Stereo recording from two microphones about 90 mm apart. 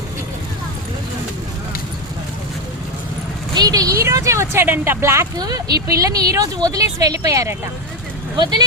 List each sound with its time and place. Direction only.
3.5 s a sound: 45° right (ahead or behind); by 5.3 s 30° right (ahead or behind)
5.4 s speech: 45° right (ahead or behind)
8.4 s speech: 50° right (ahead or behind)